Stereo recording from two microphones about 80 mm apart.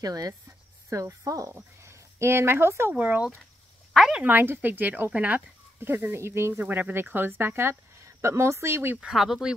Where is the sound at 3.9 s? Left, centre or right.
Centre.